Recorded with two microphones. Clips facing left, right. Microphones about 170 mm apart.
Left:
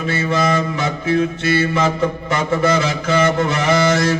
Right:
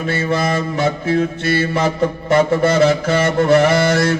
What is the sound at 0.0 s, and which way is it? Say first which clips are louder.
Mantra: right 1 dB; 55° right (ahead or behind).